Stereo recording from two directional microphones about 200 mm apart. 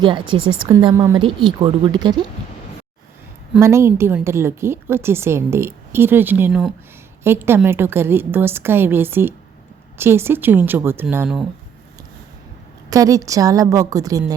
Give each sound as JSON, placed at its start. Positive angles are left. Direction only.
{"t": 0.0, "sound": "a woman's voice", "side_deg": -25}
{"t": 3.6, "sound": "a woman's voice", "side_deg": -15}
{"t": 12.9, "sound": "a woman's voice", "side_deg": -15}